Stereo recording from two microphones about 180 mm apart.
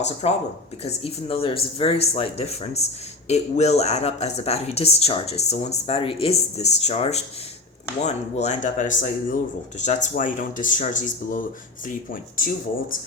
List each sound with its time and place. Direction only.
0.0 s speech: 40° left (ahead or behind)